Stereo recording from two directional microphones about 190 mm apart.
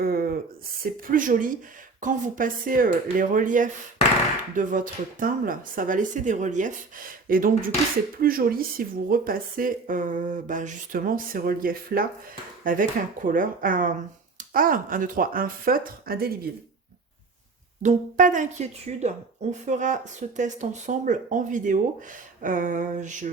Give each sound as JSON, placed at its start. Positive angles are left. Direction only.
{"t": 0.0, "sound": "a sound", "side_deg": -50}
{"t": 0.8, "sound": "speech", "side_deg": -45}
{"t": 17.8, "sound": "a woman's voice", "side_deg": -40}